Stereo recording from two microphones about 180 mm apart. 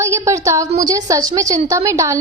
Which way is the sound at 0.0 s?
15° right (ahead or behind).